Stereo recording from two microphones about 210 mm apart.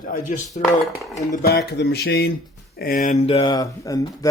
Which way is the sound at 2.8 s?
40° left (ahead or behind).